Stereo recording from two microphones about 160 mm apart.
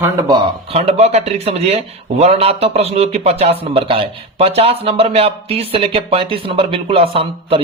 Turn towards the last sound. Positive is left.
turn(degrees=-35)  # may be behind; listen again after turning